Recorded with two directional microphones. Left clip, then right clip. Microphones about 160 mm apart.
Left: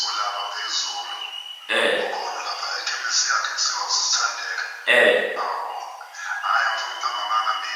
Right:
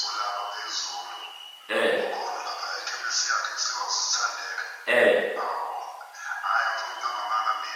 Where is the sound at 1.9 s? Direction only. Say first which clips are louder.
Left 3 dB; 20° right (ahead or behind).